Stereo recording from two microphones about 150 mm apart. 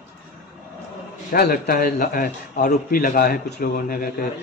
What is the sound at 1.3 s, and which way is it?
A man's voice, 85° left.